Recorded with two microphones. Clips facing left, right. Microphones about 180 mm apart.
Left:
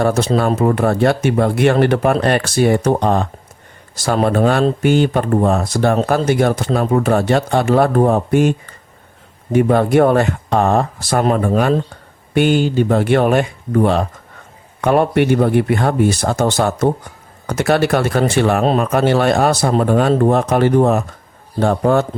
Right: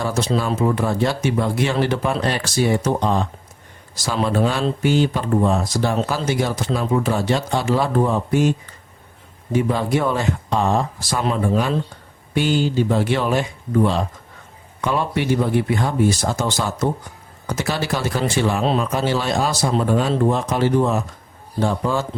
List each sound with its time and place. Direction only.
0.0 s speech: 60° left (ahead or behind)